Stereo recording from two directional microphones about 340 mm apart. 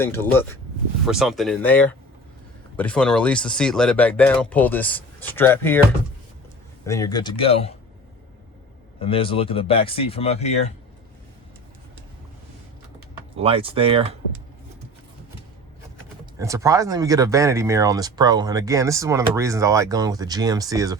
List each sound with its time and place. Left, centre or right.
0.0 s speech: centre
6.8 s speech: centre
9.0 s speech: centre
13.3 s speech: centre
16.4 s speech: centre